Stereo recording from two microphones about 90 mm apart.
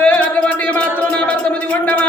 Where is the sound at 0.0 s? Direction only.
15° left (ahead or behind).